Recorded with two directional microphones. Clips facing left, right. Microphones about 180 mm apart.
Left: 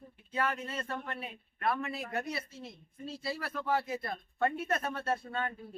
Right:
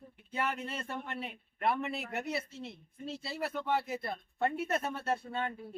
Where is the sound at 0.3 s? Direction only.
25° right (ahead or behind).